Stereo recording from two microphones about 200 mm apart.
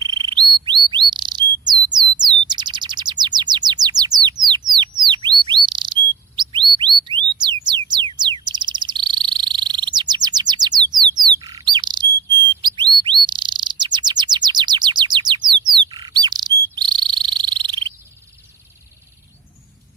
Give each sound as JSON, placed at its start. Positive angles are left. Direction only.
{"t": 0.0, "sound": "bird", "side_deg": -20}
{"t": 7.3, "sound": "music", "side_deg": -20}
{"t": 7.9, "sound": "frog", "side_deg": -20}
{"t": 12.6, "sound": "chirp", "side_deg": -20}
{"t": 15.9, "sound": "bird", "side_deg": -20}
{"t": 16.7, "sound": "bird vocalization", "side_deg": -20}
{"t": 17.3, "sound": "frog", "side_deg": -25}